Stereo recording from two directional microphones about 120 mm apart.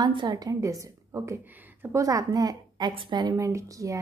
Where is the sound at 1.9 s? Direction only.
30° right (ahead or behind).